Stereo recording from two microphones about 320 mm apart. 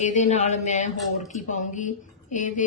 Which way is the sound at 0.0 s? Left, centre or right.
Left.